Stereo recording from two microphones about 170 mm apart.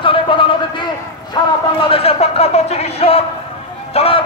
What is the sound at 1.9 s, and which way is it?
A man's voice, 35° left (ahead or behind).